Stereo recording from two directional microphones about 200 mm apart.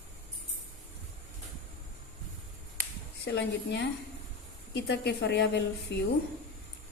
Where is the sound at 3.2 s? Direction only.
60° left (ahead or behind).